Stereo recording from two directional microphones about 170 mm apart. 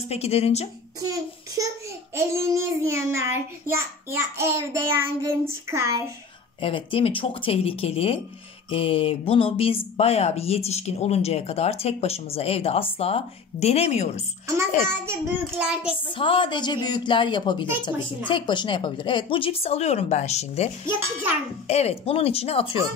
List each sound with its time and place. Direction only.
0.1 s speech: 35° left (ahead or behind)
1.0 s a child's voice: 20° right (ahead or behind)
6.6 s speech: 30° left (ahead or behind)
14.9 s a child's voice: 15° right (ahead or behind)
16.2 s a woman's voice: 30° left (ahead or behind)